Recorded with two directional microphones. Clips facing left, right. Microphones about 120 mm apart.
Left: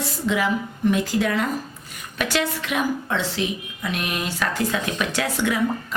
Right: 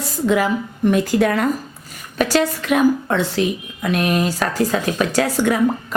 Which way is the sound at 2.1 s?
40° right (ahead or behind).